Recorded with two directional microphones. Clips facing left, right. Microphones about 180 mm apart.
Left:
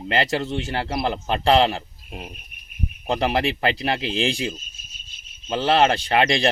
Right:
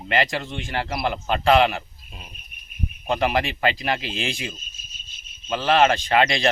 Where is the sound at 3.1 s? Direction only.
30° left (ahead or behind).